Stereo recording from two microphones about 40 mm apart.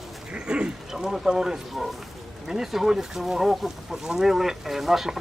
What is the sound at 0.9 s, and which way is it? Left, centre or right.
Speech, centre.